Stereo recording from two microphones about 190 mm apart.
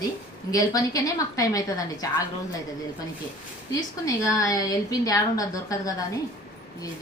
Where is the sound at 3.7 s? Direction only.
15° left (ahead or behind).